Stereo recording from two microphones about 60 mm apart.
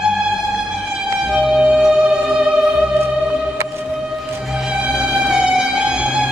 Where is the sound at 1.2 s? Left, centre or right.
Centre.